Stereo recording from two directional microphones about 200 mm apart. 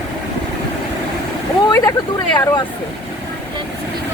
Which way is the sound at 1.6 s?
15° left (ahead or behind).